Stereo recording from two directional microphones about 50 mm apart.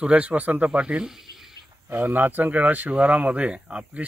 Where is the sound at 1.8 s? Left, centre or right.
Right.